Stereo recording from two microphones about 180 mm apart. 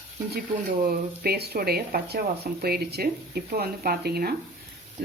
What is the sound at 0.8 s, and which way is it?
Speech, 60° right (ahead or behind).